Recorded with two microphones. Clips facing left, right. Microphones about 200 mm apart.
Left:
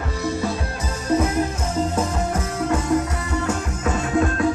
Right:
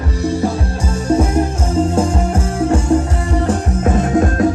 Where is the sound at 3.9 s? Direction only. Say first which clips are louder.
Right 5 dB; 45° right (ahead or behind).